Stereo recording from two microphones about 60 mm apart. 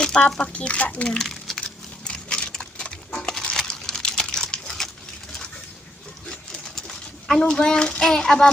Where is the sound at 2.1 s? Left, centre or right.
Centre.